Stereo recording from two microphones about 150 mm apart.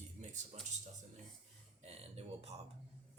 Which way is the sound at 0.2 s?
50° right (ahead or behind).